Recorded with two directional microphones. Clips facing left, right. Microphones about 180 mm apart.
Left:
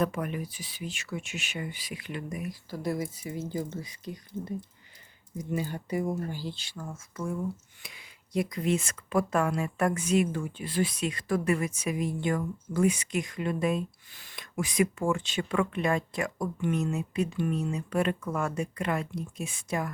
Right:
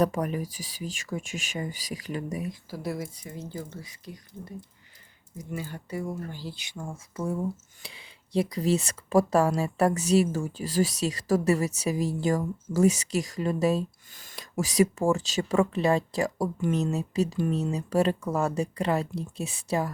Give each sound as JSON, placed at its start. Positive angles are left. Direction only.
{"t": 0.0, "sound": "speech", "side_deg": -40}
{"t": 2.6, "sound": "speech", "side_deg": -5}
{"t": 3.6, "sound": "speech", "side_deg": 20}
{"t": 7.2, "sound": "speech", "side_deg": -30}
{"t": 15.5, "sound": "speech", "side_deg": -30}